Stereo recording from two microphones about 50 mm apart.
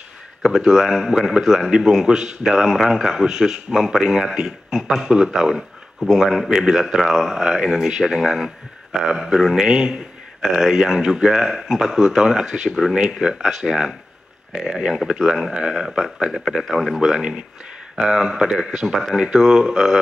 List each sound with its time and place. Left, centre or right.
0.4 s a man's voice: centre
9.7 s a man's voice: centre
17.0 s a man's voice: centre